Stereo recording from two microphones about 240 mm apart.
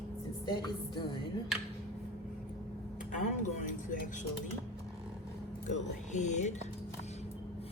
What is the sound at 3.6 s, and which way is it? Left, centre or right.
Music, left.